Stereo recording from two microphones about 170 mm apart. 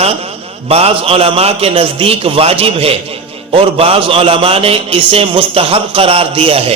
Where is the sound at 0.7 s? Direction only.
35° right (ahead or behind).